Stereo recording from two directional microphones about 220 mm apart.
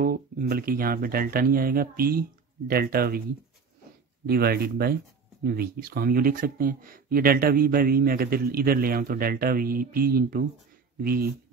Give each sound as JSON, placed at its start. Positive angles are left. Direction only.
{"t": 0.0, "sound": "speech", "side_deg": -40}
{"t": 4.3, "sound": "speech", "side_deg": -45}